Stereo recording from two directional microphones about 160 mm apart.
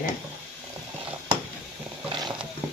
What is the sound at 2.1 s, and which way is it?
Wild animals, 30° right (ahead or behind).